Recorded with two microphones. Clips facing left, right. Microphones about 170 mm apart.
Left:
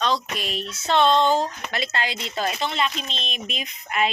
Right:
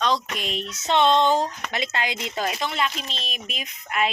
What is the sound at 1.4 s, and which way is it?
A woman's voice, 15° right (ahead or behind).